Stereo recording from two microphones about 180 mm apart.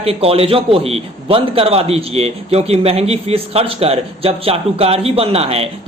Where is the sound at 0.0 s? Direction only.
35° right (ahead or behind).